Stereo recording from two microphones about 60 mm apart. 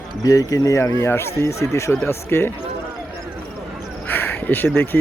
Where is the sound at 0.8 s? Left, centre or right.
Left.